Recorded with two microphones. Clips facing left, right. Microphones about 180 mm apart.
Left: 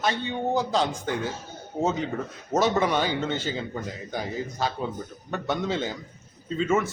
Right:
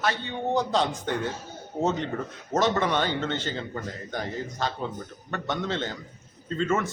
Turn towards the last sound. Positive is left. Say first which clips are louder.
# left 2 dB
turn(degrees=5)  # may be behind; listen again after turning